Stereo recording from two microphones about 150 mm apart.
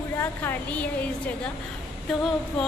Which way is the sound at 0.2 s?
15° left (ahead or behind).